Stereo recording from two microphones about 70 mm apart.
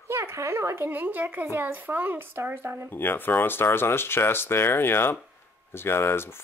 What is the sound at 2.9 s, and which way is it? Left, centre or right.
Speech, left.